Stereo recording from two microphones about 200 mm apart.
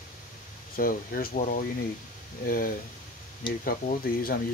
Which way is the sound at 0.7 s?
45° left (ahead or behind).